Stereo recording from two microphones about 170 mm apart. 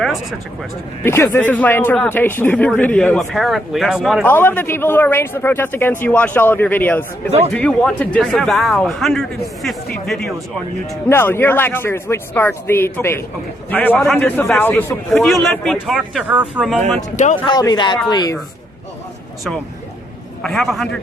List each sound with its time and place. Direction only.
0.0 s a sound: centre (ahead or behind)
1.0 s speech: 15° left (ahead or behind); by 4.3 s centre (ahead or behind)
4.3 s speech: 10° left (ahead or behind)
11.1 s speech: 15° left (ahead or behind)
15.4 s speech: centre (ahead or behind)
17.3 s speech: 25° left (ahead or behind)
20.4 s speech: centre (ahead or behind)